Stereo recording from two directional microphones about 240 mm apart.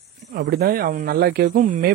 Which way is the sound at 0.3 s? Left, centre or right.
Right.